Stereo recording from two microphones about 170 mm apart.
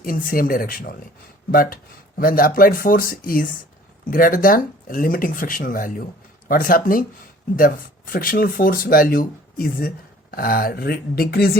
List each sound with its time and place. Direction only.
0.0 s speech: 55° left (ahead or behind)